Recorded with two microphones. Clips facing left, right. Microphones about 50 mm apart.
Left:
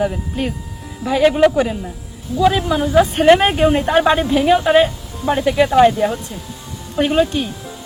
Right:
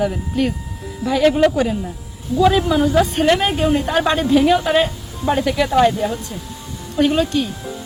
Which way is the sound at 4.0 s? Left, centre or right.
Centre.